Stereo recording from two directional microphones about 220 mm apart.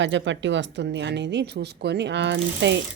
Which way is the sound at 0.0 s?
55° right (ahead or behind).